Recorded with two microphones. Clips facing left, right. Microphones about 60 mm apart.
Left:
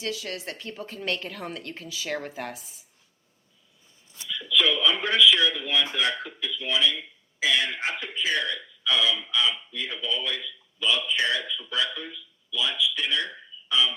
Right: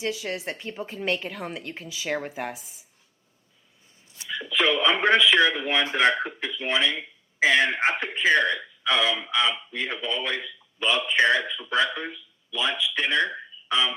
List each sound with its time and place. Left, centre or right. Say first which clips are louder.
0.0 s a woman's voice: right 3 dB; right
4.3 s speech: right 1 dB; right